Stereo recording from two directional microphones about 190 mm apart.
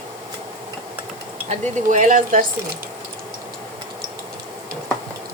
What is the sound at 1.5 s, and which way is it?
Speech, 40° right (ahead or behind).